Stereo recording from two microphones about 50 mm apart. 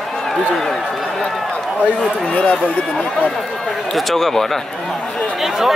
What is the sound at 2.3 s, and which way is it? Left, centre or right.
Speech, left.